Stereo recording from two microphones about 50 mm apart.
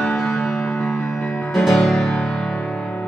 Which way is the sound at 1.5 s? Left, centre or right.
Centre.